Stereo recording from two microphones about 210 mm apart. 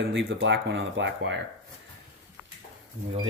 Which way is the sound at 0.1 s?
65° right (ahead or behind).